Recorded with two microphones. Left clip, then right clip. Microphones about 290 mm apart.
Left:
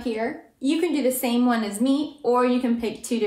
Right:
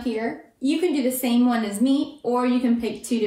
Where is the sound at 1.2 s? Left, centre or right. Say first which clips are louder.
Right 1 dB; left.